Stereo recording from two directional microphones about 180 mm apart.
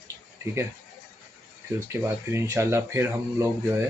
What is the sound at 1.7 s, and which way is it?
Speech, 15° right (ahead or behind).